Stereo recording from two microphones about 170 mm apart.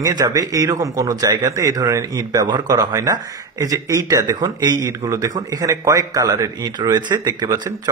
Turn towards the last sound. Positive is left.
turn(degrees=-25)  # may be behind; listen again after turning